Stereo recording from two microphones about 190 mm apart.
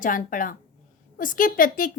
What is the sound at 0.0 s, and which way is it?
A woman's voice, 45° left (ahead or behind).